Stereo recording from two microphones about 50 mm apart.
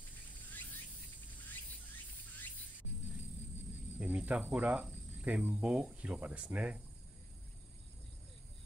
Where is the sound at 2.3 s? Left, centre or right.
Left.